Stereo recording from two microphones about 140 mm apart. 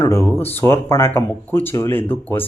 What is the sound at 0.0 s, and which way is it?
Speech, 15° left (ahead or behind).